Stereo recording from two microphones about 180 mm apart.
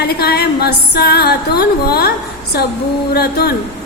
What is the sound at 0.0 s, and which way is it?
A woman's voice, 60° left (ahead or behind).